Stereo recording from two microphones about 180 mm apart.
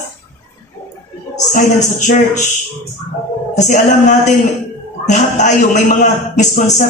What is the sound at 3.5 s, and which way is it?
A man's voice, 45° left (ahead or behind).